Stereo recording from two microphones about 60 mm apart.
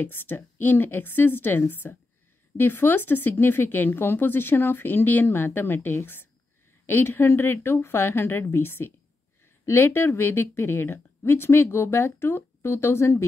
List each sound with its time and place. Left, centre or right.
0.0 s speech: left